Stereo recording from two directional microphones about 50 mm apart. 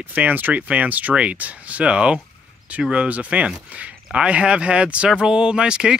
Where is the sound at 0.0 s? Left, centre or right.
Right.